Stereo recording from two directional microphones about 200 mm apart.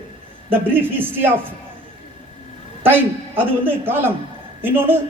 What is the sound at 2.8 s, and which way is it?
A woman's voice, 10° right (ahead or behind).